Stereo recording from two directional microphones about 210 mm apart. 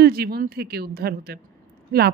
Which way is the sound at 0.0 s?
50° right (ahead or behind).